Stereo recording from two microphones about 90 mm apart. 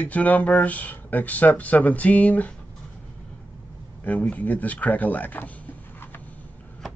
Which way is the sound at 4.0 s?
20° left (ahead or behind).